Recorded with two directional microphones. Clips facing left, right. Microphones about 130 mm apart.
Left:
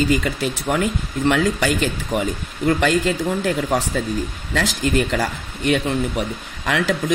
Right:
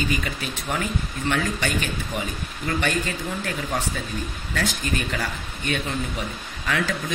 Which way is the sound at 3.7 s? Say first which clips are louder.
Left 7 dB; 90° left.